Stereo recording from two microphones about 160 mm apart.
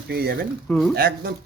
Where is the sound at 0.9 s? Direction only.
70° right (ahead or behind).